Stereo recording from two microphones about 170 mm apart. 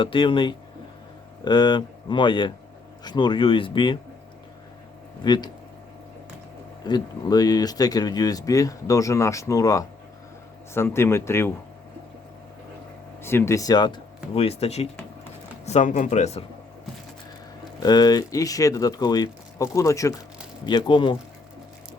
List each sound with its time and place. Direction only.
0.0 s speech: 30° left (ahead or behind)
5.2 s speech: 25° left (ahead or behind)
6.8 s speech: 25° left (ahead or behind)
13.2 s speech: 15° left (ahead or behind); by 16.4 s 40° left (ahead or behind)
17.8 s speech: 25° left (ahead or behind)